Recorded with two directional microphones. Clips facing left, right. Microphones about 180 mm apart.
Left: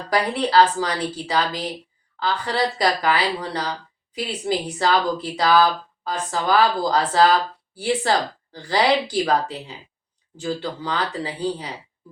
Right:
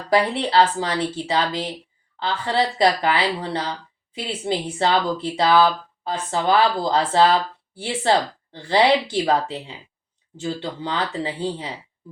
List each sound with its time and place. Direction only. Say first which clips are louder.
0.1 s speech: right 1 dB; 25° right (ahead or behind)
8.6 s speech: right 2 dB; 25° right (ahead or behind)